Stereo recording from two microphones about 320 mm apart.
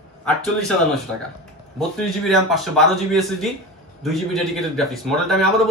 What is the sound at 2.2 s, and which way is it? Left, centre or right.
A man's voice, centre.